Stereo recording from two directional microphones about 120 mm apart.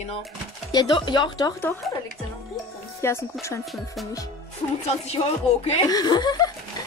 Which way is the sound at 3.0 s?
25° left (ahead or behind).